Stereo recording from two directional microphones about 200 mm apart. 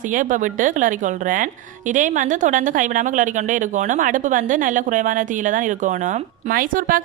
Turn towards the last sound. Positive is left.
turn(degrees=-45)  # may be behind; listen again after turning